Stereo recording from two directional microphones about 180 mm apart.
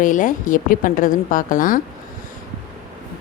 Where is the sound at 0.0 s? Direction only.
45° left (ahead or behind).